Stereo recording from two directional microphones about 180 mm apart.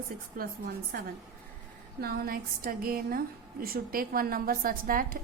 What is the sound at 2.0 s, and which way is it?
A woman's voice, 55° right (ahead or behind).